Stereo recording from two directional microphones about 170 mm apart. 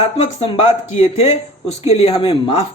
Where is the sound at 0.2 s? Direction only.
35° left (ahead or behind).